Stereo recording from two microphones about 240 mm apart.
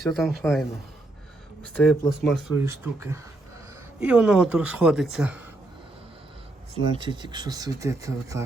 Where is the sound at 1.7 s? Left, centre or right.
Centre.